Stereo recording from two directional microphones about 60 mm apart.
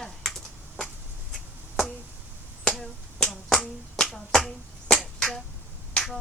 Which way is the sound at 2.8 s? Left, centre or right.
Centre.